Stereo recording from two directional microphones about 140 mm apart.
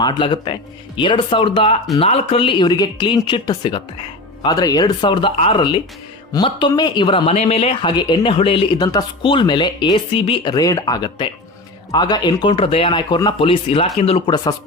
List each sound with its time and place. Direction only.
0.0 s speech: 35° left (ahead or behind)
13.4 s speech: 40° left (ahead or behind)